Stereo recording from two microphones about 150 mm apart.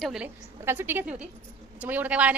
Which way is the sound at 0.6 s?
15° right (ahead or behind).